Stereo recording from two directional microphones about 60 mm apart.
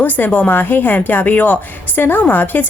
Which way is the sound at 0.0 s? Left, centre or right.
Left.